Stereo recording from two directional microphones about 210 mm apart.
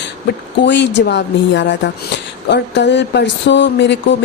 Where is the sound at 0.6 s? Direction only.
55° left (ahead or behind).